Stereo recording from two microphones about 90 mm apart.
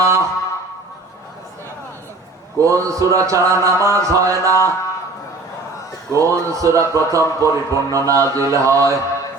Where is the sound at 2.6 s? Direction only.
35° right (ahead or behind).